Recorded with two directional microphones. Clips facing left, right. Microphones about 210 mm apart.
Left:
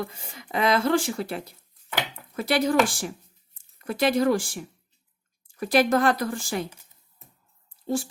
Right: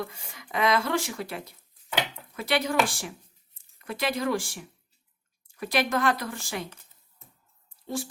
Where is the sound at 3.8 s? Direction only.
40° left (ahead or behind).